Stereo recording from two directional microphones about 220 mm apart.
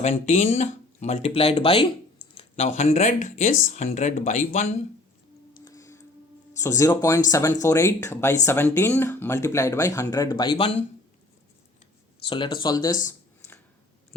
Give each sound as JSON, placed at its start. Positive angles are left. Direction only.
{"t": 0.0, "sound": "speech", "side_deg": 30}
{"t": 5.6, "sound": "a sound", "side_deg": 15}
{"t": 6.6, "sound": "speech", "side_deg": 15}
{"t": 12.2, "sound": "speech", "side_deg": 25}